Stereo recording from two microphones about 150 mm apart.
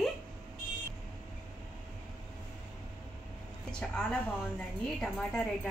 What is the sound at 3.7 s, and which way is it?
A woman's voice, 5° left (ahead or behind).